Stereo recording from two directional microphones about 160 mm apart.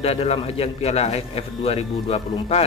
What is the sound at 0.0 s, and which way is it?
Speech, 40° left (ahead or behind).